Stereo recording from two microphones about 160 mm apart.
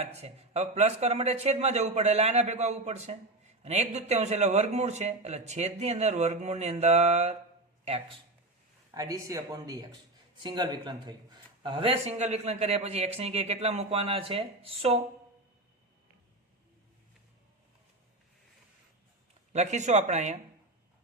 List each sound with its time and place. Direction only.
0.0 s a man's voice: 40° right (ahead or behind)
8.9 s speech: 20° right (ahead or behind); by 15.0 s 35° right (ahead or behind)
19.5 s a man's voice: 45° right (ahead or behind)